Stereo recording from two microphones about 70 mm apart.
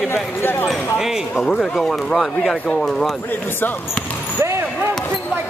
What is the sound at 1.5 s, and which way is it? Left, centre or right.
Speech, centre.